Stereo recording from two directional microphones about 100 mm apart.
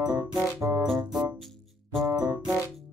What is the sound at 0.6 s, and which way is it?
Music, 30° right (ahead or behind).